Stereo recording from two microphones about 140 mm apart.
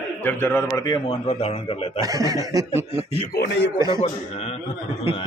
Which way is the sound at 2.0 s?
25° right (ahead or behind).